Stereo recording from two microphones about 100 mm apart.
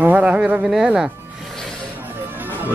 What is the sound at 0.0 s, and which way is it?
Speech, 10° right (ahead or behind).